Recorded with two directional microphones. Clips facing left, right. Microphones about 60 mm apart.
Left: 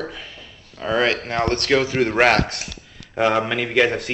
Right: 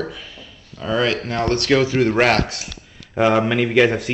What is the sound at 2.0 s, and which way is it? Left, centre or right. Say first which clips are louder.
Speech: even; centre.